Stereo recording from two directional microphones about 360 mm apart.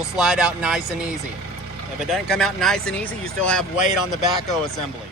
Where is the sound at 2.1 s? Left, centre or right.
Centre.